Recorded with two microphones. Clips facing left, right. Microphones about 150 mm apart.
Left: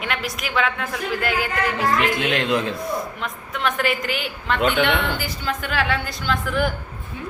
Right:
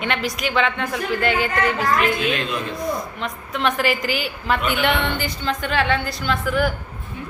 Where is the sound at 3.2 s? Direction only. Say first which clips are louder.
Right 2 dB; centre (ahead or behind).